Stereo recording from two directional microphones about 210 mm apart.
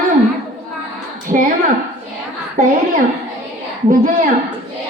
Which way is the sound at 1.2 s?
40° right (ahead or behind).